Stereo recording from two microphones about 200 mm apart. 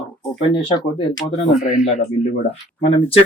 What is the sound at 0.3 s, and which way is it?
Speech, 25° left (ahead or behind).